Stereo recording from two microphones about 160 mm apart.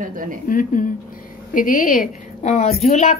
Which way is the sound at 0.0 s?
60° right (ahead or behind).